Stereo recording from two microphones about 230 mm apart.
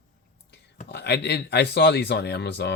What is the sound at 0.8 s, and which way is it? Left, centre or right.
Speech, left.